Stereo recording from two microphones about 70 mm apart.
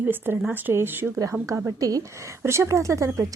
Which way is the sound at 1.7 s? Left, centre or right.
Right.